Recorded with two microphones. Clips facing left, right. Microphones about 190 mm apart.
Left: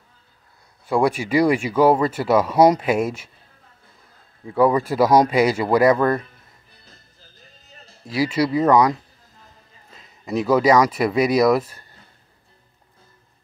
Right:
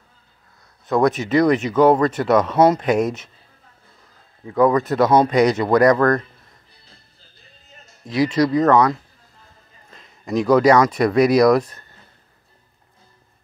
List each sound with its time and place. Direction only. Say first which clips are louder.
0.8 s speech: right 2 dB; 10° left (ahead or behind)
4.6 s speech: right 1 dB; 10° left (ahead or behind)
6.9 s music: left 4 dB; 40° left (ahead or behind)
8.1 s speech: right 3 dB; 10° left (ahead or behind)
9.9 s speech: right 2 dB; 5° left (ahead or behind)